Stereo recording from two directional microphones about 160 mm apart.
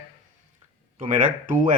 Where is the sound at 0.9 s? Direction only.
55° right (ahead or behind).